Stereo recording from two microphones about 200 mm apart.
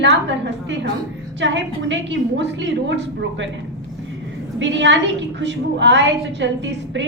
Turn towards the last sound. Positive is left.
turn(degrees=-65)  # may be behind; listen again after turning